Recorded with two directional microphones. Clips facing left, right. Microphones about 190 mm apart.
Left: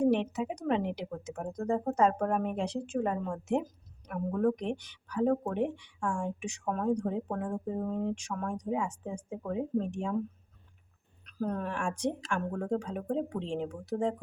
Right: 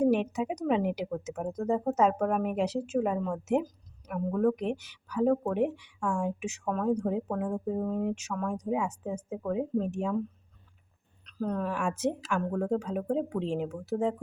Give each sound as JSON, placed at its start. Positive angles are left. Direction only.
{"t": 0.0, "sound": "speech", "side_deg": -10}
{"t": 11.3, "sound": "speech", "side_deg": 5}